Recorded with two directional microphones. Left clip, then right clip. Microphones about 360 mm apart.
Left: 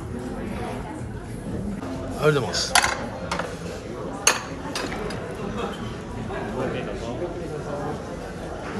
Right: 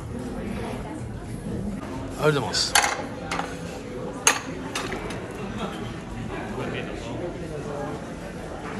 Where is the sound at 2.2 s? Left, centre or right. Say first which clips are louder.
Left 1 dB; centre.